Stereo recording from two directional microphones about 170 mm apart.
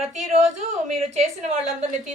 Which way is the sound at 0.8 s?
40° right (ahead or behind).